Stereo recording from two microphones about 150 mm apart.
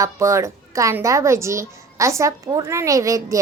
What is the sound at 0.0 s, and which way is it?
A woman's voice, 20° right (ahead or behind).